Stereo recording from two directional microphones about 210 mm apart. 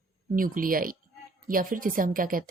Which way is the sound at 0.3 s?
40° right (ahead or behind).